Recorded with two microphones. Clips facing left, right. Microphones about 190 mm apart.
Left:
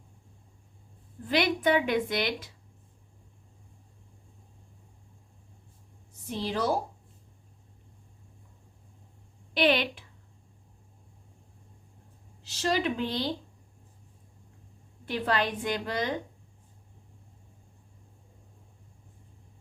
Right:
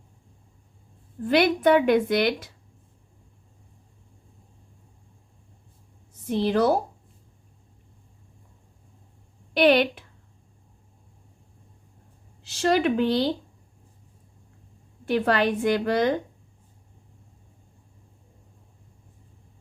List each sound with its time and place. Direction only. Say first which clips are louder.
1.3 s a woman's voice: right 6 dB; 50° right (ahead or behind)
6.3 s a woman's voice: right 8 dB; 65° right (ahead or behind)
9.6 s a woman's voice: right 7 dB; 50° right (ahead or behind)
12.4 s speech: right 6 dB; 60° right (ahead or behind)
15.0 s a woman's voice: right 7 dB; 50° right (ahead or behind)